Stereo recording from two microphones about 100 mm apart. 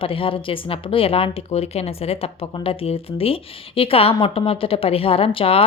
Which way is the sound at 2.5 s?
65° left (ahead or behind).